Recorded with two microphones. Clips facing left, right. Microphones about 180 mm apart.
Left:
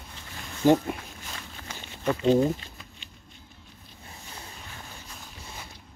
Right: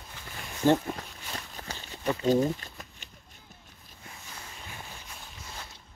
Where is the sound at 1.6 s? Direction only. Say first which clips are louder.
Left 1 dB; 40° right (ahead or behind).